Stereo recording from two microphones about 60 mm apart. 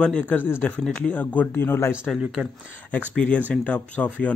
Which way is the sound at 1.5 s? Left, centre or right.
Left.